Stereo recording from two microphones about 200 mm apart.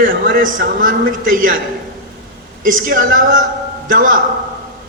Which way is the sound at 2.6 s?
45° right (ahead or behind).